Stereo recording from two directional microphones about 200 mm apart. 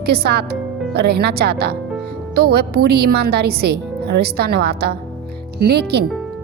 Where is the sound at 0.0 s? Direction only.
50° right (ahead or behind).